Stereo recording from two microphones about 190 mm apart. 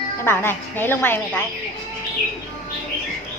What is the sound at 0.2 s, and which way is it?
Speech, 10° left (ahead or behind).